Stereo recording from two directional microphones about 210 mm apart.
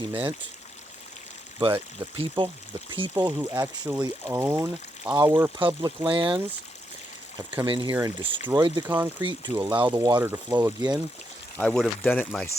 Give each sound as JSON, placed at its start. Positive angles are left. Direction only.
{"t": 0.1, "sound": "speech", "side_deg": -10}
{"t": 1.5, "sound": "speech", "side_deg": -15}
{"t": 6.1, "sound": "speech", "side_deg": -25}
{"t": 7.9, "sound": "speech", "side_deg": -10}
{"t": 8.5, "sound": "speech", "side_deg": -20}
{"t": 8.9, "sound": "speech", "side_deg": -10}
{"t": 11.6, "sound": "speech", "side_deg": 5}